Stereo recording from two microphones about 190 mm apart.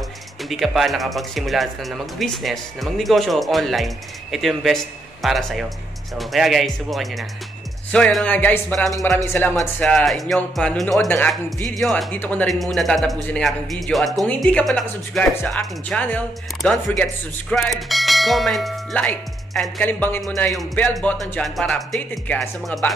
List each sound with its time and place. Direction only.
0.4 s speech: centre (ahead or behind)